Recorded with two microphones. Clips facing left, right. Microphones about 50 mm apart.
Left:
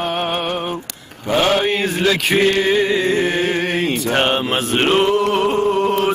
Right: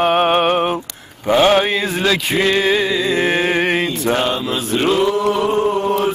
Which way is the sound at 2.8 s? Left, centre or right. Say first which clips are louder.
Left 1 dB; left.